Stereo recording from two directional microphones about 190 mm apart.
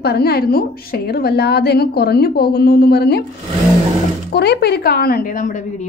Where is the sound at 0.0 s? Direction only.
55° left (ahead or behind).